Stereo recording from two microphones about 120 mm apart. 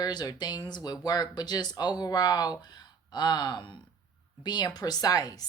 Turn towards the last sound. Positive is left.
turn(degrees=30)  # may be behind; listen again after turning